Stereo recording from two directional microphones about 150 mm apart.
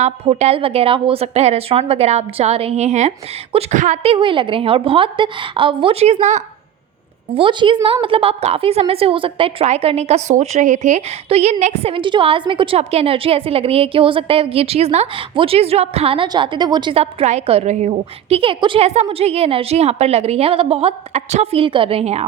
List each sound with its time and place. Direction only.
0.0 s a woman's voice: 45° right (ahead or behind)
7.3 s a woman's voice: 35° right (ahead or behind)